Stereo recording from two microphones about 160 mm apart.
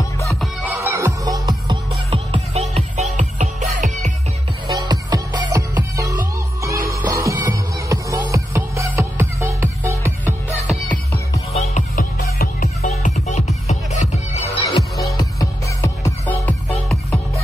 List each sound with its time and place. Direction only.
0.3 s music: centre (ahead or behind)
0.7 s music: 15° right (ahead or behind)
2.0 s music: 35° right (ahead or behind)
4.6 s music: 25° right (ahead or behind)
10.7 s music: centre (ahead or behind)
11.5 s music: 45° left (ahead or behind)
11.9 s music: 65° left (ahead or behind)
13.3 s music: 45° left (ahead or behind)
15.1 s music: 20° left (ahead or behind)